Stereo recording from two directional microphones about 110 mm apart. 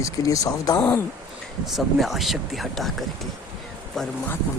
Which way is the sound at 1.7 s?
Centre (ahead or behind).